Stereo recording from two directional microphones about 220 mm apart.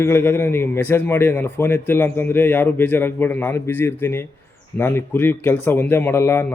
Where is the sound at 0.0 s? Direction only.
10° left (ahead or behind).